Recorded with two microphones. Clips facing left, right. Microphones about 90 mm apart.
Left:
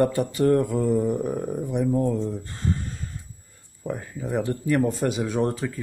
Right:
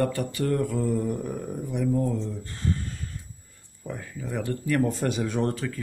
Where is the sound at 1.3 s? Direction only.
30° left (ahead or behind).